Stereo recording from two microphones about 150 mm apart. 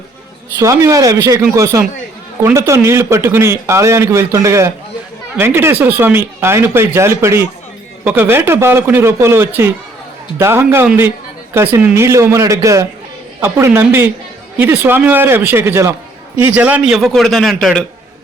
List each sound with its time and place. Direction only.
0.6 s a man's voice: 20° right (ahead or behind); by 17.8 s centre (ahead or behind)